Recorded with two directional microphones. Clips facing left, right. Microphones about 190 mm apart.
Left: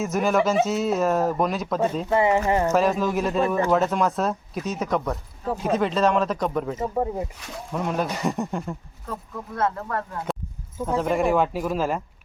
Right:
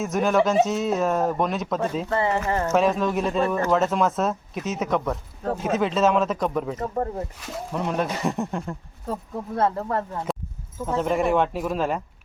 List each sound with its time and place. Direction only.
0.0 s speech: centre (ahead or behind)
2.0 s speech: 15° left (ahead or behind)
2.7 s speech: centre (ahead or behind)
9.6 s speech: 30° right (ahead or behind)
10.8 s speech: centre (ahead or behind)